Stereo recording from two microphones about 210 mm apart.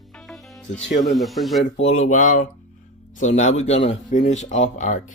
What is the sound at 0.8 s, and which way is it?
Speech, 55° left (ahead or behind).